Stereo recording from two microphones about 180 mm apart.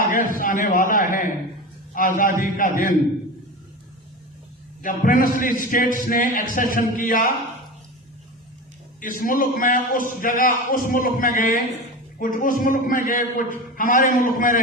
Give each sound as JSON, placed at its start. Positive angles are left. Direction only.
{"t": 0.1, "sound": "a man's voice", "side_deg": 50}
{"t": 4.8, "sound": "a man's voice", "side_deg": 50}
{"t": 9.0, "sound": "a man's voice", "side_deg": 50}